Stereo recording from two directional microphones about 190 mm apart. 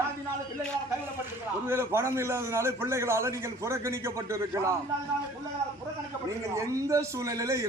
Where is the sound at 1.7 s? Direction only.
15° right (ahead or behind).